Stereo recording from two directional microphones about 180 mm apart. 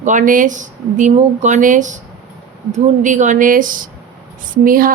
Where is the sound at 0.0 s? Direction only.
45° right (ahead or behind).